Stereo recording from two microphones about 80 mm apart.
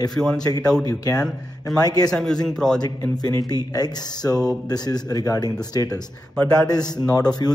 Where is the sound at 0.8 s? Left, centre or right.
Left.